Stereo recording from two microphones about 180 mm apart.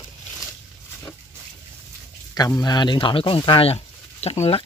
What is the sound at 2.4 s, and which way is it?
Speech, 20° left (ahead or behind).